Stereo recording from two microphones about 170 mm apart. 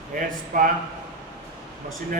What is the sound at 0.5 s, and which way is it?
Speech, 50° right (ahead or behind).